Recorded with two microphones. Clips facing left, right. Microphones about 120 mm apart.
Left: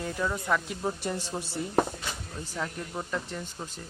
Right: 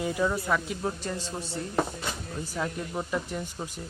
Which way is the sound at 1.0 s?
15° left (ahead or behind).